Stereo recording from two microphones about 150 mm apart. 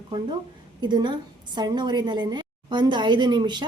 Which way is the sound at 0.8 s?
30° right (ahead or behind).